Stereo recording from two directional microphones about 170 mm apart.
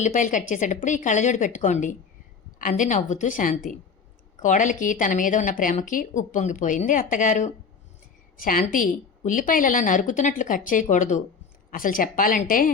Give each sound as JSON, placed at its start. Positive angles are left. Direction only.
{"t": 0.0, "sound": "a woman's voice", "side_deg": 50}